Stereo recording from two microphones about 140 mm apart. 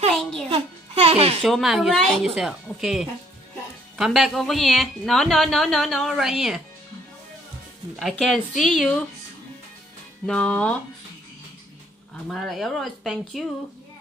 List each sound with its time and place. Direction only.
0.1 s music: 5° left (ahead or behind)
0.5 s music: 45° right (ahead or behind)
1.4 s a woman's voice: centre (ahead or behind)
7.9 s a woman's voice: centre (ahead or behind)
10.2 s speech: 5° left (ahead or behind)
12.3 s a woman's voice: centre (ahead or behind)